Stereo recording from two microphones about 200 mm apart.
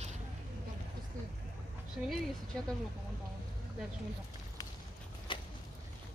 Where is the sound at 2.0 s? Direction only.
5° right (ahead or behind).